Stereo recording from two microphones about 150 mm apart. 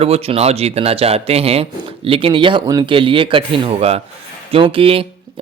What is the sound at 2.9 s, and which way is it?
Speech, 35° right (ahead or behind).